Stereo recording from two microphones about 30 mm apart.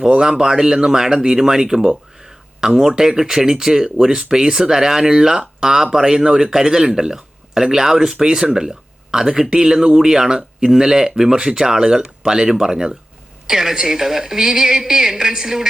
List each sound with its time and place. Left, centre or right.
0.2 s speech: centre
1.9 s a sound: centre
2.9 s speech: centre